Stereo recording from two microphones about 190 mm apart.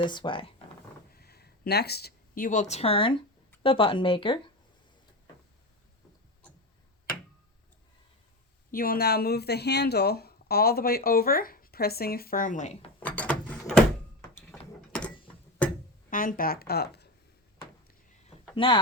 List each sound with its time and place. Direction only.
0.0 s speech: 25° left (ahead or behind)
1.1 s speech: 55° left (ahead or behind); by 4.5 s 25° left (ahead or behind)
8.7 s speech: 50° left (ahead or behind)
13.0 s a sound: 5° left (ahead or behind)
16.0 s speech: 45° left (ahead or behind)
18.5 s speech: 25° left (ahead or behind)